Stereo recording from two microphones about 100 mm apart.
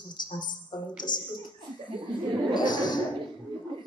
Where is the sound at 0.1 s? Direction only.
45° left (ahead or behind).